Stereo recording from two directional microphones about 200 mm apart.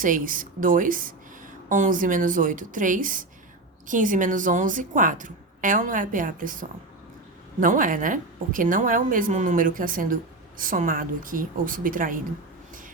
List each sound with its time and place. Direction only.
0.0 s a woman's voice: 40° right (ahead or behind)